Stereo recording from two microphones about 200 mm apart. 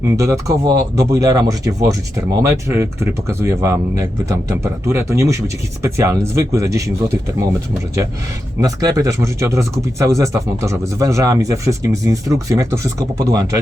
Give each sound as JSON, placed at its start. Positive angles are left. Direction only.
{"t": 0.0, "sound": "speech", "side_deg": -15}
{"t": 8.6, "sound": "speech", "side_deg": -15}